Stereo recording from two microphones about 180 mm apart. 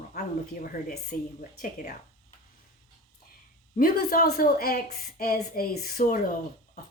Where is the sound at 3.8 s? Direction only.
55° left (ahead or behind).